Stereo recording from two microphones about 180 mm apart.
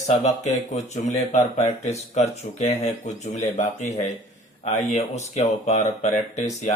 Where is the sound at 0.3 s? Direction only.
40° left (ahead or behind).